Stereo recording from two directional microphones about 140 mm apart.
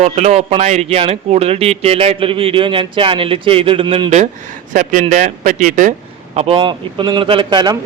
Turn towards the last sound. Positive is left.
turn(degrees=-30)  # may be behind; listen again after turning